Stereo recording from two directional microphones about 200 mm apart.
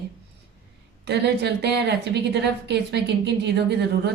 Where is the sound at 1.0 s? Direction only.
55° right (ahead or behind).